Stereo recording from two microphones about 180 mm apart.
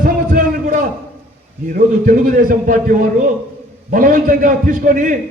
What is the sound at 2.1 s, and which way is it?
A man's voice, 50° right (ahead or behind).